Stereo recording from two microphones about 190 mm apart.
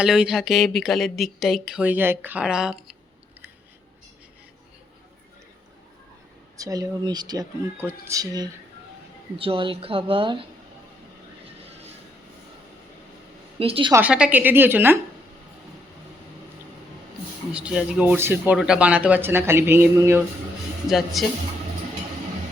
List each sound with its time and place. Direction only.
0.0 s speech: 5° right (ahead or behind)
6.6 s speech: 20° right (ahead or behind)
13.6 s speech: 30° right (ahead or behind)
13.9 s speech: 5° right (ahead or behind)
17.5 s speech: 5° right (ahead or behind)
20.8 s speech: centre (ahead or behind)